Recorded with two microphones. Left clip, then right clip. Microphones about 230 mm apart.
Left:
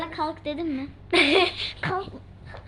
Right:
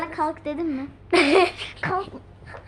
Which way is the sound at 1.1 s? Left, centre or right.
Centre.